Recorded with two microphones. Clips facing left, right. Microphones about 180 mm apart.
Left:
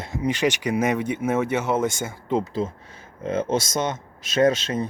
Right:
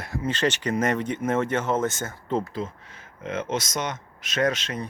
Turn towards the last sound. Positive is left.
turn(degrees=30)  # may be behind; listen again after turning